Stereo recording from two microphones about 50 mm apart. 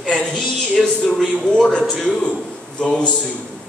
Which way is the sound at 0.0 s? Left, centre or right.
Centre.